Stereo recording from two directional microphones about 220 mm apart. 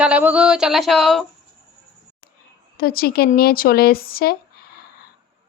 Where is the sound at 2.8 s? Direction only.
40° left (ahead or behind).